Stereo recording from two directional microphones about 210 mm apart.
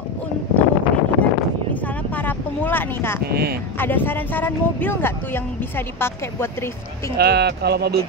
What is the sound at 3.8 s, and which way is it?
Speech, 10° left (ahead or behind).